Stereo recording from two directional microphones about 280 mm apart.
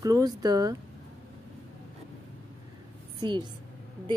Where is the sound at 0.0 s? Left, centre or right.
Centre.